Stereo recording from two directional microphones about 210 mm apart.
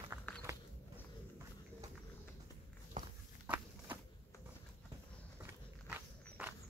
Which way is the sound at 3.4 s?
10° right (ahead or behind).